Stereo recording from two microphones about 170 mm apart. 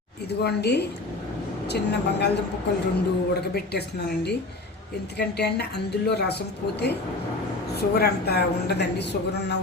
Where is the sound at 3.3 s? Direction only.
70° left (ahead or behind).